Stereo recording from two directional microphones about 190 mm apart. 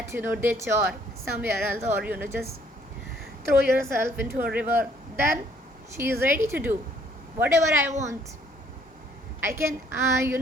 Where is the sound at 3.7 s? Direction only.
15° right (ahead or behind).